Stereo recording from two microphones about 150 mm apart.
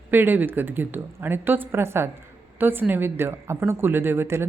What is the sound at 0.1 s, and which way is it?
Speech, 15° right (ahead or behind).